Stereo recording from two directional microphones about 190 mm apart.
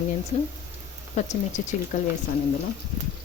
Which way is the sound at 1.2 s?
35° left (ahead or behind).